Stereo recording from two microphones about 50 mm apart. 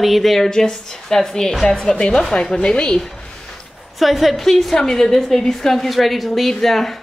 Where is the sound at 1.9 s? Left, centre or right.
Left.